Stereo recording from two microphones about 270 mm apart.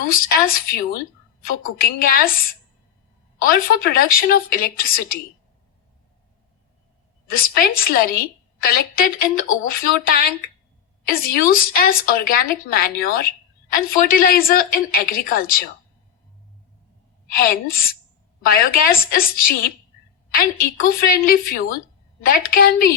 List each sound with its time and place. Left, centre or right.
0.1 s a woman's voice: left
7.3 s a woman's voice: left
17.3 s a woman's voice: left